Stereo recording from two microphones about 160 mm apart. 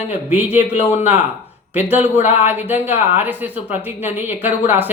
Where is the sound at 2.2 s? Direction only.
45° left (ahead or behind).